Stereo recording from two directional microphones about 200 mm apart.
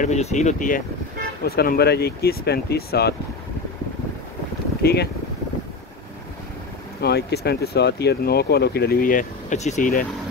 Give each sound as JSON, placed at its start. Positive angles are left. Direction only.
{"t": 0.0, "sound": "speech", "side_deg": 35}
{"t": 4.8, "sound": "speech", "side_deg": 55}
{"t": 7.0, "sound": "speech", "side_deg": 55}